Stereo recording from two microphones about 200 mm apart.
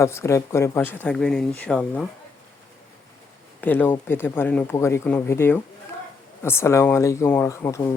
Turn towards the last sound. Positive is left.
turn(degrees=10)  # may be behind; listen again after turning